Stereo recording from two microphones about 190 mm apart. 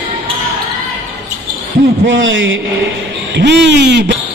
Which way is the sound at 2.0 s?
80° right.